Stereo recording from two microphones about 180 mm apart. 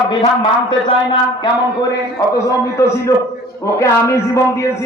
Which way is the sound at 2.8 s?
15° left (ahead or behind).